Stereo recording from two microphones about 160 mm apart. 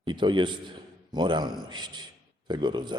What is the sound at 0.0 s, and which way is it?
A man's voice, 30° right (ahead or behind).